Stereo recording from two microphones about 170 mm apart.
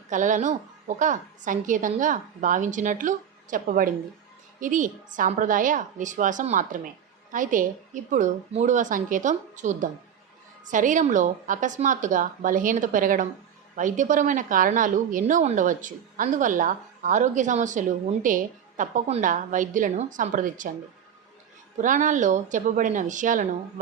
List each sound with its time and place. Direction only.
0.1 s a woman's voice: 50° right (ahead or behind)
21.8 s a woman's voice: 50° right (ahead or behind)